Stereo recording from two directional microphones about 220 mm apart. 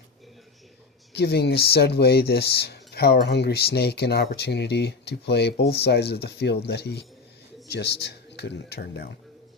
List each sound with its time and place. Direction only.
1.1 s speech: 50° left (ahead or behind)